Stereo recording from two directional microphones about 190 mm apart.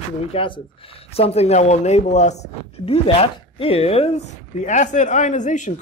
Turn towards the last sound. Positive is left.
turn(degrees=40)  # may be behind; listen again after turning